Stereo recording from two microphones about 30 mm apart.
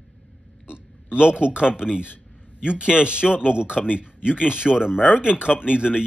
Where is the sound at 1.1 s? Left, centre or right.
Right.